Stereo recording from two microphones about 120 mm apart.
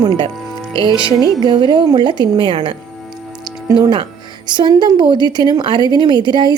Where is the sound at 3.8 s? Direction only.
40° right (ahead or behind).